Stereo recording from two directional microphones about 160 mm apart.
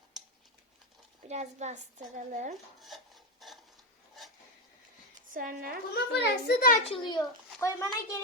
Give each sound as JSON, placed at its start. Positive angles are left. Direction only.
{"t": 1.3, "sound": "a woman's voice", "side_deg": -45}
{"t": 3.4, "sound": "a sound", "side_deg": 0}
{"t": 5.3, "sound": "speech", "side_deg": -60}
{"t": 5.9, "sound": "a child's voice", "side_deg": 75}
{"t": 6.8, "sound": "a child's voice", "side_deg": 35}
{"t": 7.2, "sound": "speech", "side_deg": 20}